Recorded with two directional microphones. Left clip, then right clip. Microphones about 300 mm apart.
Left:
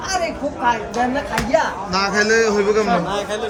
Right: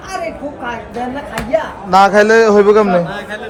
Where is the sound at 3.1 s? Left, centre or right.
Left.